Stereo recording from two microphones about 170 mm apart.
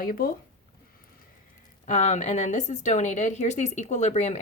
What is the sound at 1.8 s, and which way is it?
Speech, 45° left (ahead or behind).